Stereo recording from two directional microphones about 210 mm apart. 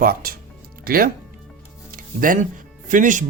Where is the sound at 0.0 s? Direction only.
45° right (ahead or behind).